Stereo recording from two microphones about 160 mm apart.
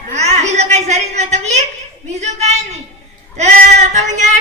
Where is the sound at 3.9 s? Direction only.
50° right (ahead or behind).